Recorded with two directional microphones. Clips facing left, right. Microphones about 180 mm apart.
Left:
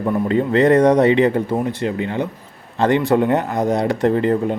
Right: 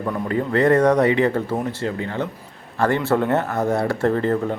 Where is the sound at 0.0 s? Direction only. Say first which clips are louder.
Left 5 dB; 20° left (ahead or behind).